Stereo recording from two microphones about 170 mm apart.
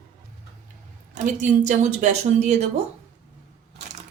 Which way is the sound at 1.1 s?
50° right (ahead or behind).